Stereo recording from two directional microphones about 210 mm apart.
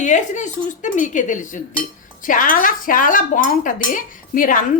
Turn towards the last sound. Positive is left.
turn(degrees=40)  # may be behind; listen again after turning